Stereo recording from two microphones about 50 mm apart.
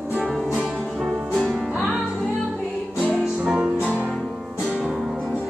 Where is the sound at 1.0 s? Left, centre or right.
Centre.